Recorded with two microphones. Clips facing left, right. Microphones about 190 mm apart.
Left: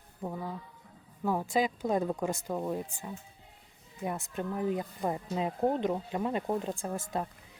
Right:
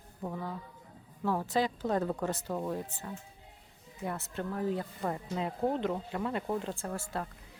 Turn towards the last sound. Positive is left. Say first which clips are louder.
# left 3 dB
turn(degrees=15)  # may be behind; listen again after turning